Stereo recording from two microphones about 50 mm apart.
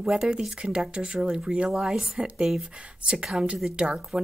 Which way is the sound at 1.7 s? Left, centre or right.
Centre.